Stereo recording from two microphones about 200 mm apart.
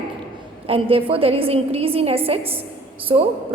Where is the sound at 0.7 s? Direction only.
30° right (ahead or behind).